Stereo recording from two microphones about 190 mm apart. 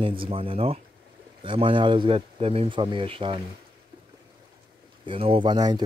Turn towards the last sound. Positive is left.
turn(degrees=-20)  # may be behind; listen again after turning